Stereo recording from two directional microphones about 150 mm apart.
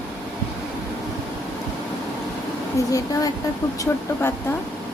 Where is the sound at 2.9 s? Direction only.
25° left (ahead or behind).